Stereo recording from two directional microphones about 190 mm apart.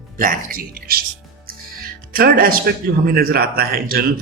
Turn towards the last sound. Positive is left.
turn(degrees=-50)  # may be behind; listen again after turning